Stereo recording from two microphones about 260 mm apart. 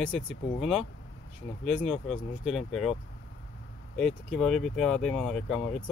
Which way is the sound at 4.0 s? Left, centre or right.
Centre.